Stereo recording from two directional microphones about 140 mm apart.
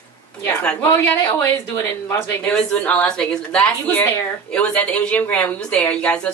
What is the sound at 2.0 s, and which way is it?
A woman's voice, 20° left (ahead or behind).